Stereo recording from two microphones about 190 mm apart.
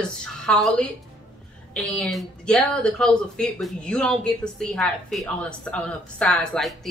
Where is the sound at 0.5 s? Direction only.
5° left (ahead or behind).